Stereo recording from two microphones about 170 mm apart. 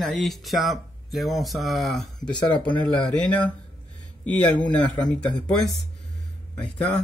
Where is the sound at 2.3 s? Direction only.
25° left (ahead or behind).